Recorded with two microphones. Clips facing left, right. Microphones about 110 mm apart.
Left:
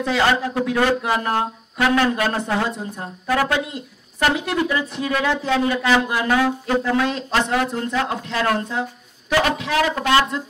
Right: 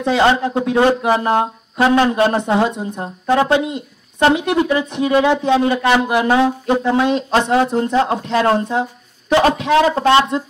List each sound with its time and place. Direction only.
0.0 s speech: 25° right (ahead or behind)